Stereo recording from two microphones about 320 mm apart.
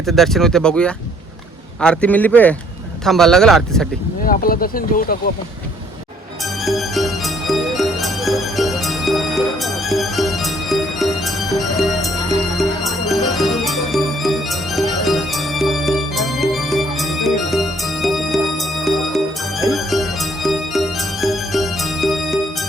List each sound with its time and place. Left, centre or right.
0.0 s speech: centre
4.2 s speech: left
6.7 s music: centre
12.5 s music: centre